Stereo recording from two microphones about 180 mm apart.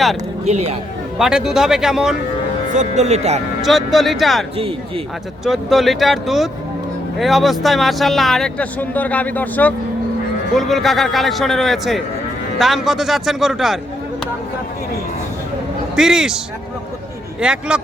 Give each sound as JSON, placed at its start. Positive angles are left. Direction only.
{"t": 0.4, "sound": "speech", "side_deg": -35}
{"t": 1.2, "sound": "speech", "side_deg": -5}
{"t": 2.6, "sound": "speech", "side_deg": -40}
{"t": 3.6, "sound": "speech", "side_deg": 0}
{"t": 5.5, "sound": "speech", "side_deg": 0}
{"t": 16.0, "sound": "speech", "side_deg": -5}
{"t": 17.4, "sound": "speech", "side_deg": -5}